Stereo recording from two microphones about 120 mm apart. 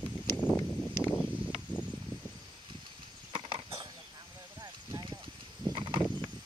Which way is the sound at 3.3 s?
45° right (ahead or behind).